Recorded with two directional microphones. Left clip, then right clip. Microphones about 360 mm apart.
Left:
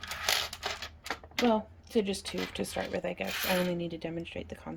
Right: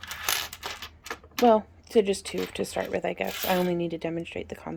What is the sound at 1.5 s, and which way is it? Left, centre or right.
Speech, centre.